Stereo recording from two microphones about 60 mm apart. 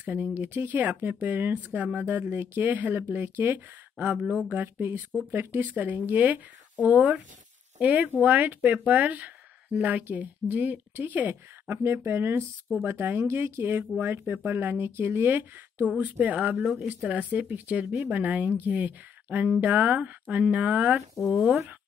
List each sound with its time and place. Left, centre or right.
0.0 s speech: right
5.8 s a woman's voice: right
21.2 s speech: centre